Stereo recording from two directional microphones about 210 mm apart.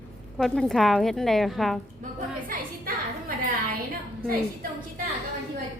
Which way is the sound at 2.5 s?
40° right (ahead or behind).